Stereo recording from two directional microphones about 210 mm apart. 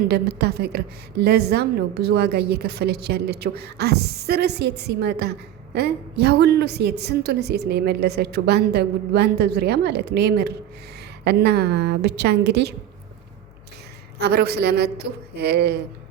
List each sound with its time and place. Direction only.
0.1 s a woman's voice: 50° right (ahead or behind)
14.2 s a woman's voice: 50° right (ahead or behind)